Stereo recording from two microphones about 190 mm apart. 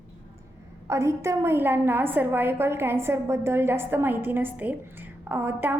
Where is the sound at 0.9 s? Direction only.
15° right (ahead or behind).